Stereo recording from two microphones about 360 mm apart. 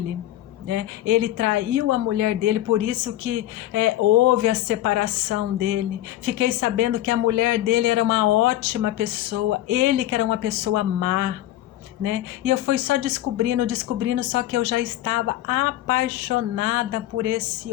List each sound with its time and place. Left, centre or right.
0.7 s speech: right